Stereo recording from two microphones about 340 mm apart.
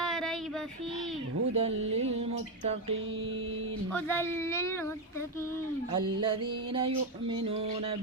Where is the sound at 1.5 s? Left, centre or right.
Centre.